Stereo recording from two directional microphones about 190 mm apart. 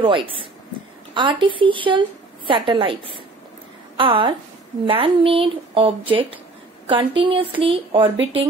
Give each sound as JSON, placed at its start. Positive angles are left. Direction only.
{"t": 0.0, "sound": "a woman's voice", "side_deg": -25}